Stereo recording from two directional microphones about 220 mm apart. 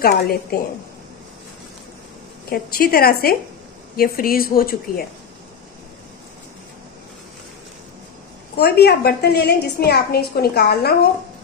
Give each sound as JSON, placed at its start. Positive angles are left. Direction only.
{"t": 0.0, "sound": "a woman's voice", "side_deg": 45}
{"t": 2.5, "sound": "a woman's voice", "side_deg": 40}
{"t": 8.5, "sound": "a woman's voice", "side_deg": 45}